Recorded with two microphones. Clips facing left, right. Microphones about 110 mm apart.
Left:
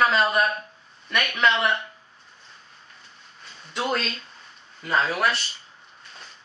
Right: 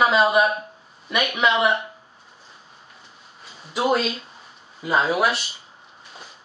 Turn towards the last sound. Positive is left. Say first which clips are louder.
# right 3 dB
turn(degrees=-5)  # may be behind; listen again after turning